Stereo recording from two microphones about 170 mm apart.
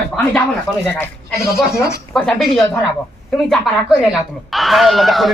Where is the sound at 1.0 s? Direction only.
15° left (ahead or behind).